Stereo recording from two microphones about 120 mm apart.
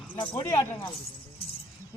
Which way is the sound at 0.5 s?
20° left (ahead or behind).